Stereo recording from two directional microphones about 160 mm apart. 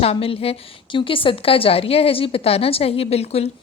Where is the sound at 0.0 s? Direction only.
40° left (ahead or behind).